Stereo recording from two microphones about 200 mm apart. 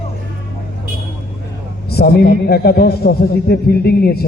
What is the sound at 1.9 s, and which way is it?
A man's voice, 55° left (ahead or behind).